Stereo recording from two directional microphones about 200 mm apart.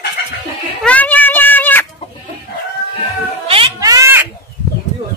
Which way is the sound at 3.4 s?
20° right (ahead or behind).